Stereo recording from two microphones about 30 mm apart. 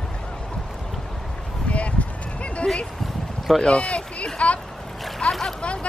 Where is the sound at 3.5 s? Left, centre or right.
Centre.